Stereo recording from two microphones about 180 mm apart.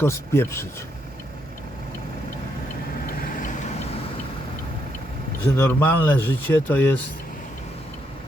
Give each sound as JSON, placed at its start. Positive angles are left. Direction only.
{"t": 0.0, "sound": "speech", "side_deg": 15}
{"t": 3.2, "sound": "vehicle", "side_deg": 50}
{"t": 5.5, "sound": "speech", "side_deg": 10}